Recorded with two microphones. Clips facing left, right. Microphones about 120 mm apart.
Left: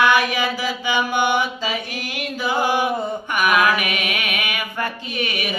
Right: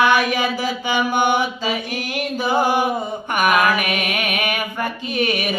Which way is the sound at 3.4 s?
45° right (ahead or behind).